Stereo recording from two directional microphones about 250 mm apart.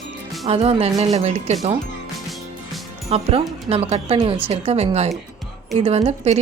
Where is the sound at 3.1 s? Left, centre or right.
Right.